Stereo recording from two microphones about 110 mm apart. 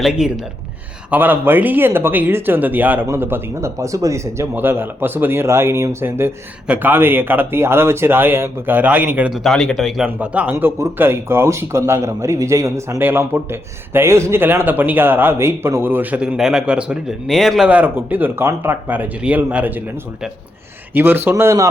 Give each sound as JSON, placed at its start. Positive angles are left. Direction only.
{"t": 0.0, "sound": "speech", "side_deg": -5}
{"t": 1.1, "sound": "a man's voice", "side_deg": -15}
{"t": 9.3, "sound": "speech", "side_deg": 0}
{"t": 10.1, "sound": "a man's voice", "side_deg": -15}
{"t": 17.7, "sound": "speech", "side_deg": -15}
{"t": 20.9, "sound": "a man's voice", "side_deg": -20}